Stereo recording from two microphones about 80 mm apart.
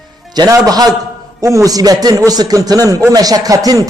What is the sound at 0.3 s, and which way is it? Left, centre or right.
A man's voice, right.